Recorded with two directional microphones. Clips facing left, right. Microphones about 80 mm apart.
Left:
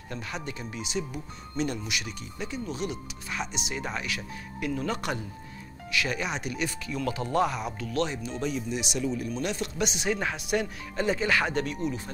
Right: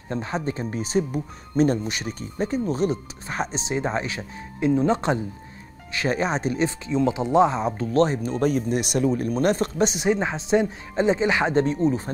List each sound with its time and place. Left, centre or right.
0.1 s speech: right